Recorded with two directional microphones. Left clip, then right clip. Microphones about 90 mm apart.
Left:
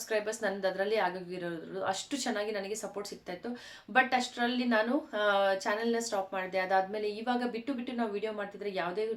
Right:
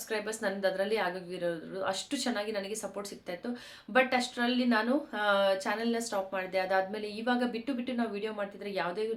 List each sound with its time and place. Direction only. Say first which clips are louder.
0.1 s a woman's voice: left 1 dB; 30° right (ahead or behind)